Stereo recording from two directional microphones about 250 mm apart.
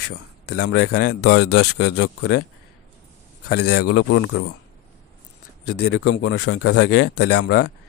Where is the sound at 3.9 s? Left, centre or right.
Left.